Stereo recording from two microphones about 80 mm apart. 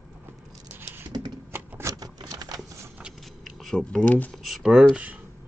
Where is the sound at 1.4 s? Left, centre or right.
Right.